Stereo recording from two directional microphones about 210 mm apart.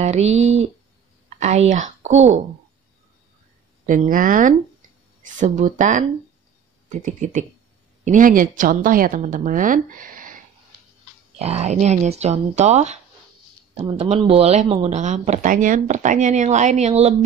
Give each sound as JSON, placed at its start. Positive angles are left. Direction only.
{"t": 0.0, "sound": "speech", "side_deg": -30}
{"t": 3.8, "sound": "speech", "side_deg": -40}
{"t": 11.3, "sound": "speech", "side_deg": -30}